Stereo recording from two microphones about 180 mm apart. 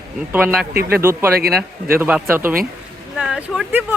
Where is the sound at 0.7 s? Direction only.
60° right (ahead or behind).